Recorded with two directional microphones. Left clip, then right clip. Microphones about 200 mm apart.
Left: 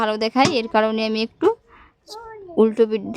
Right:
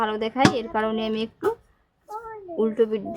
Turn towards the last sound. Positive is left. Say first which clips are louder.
# left 4 dB
turn(degrees=50)  # may be behind; listen again after turning